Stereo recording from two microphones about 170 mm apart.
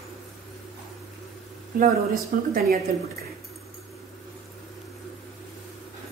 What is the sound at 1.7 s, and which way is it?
Speech, 55° right (ahead or behind).